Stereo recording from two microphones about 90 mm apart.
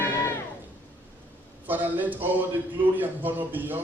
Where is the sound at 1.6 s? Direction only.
20° right (ahead or behind).